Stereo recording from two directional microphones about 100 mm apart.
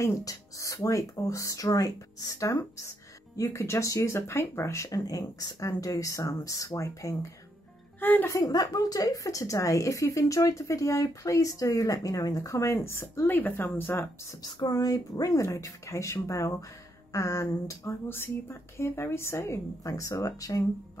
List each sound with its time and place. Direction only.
0.0 s a woman's voice: 30° left (ahead or behind)
8.0 s speech: 20° left (ahead or behind)
8.3 s a woman's voice: 35° left (ahead or behind)
14.4 s a woman's voice: 40° left (ahead or behind)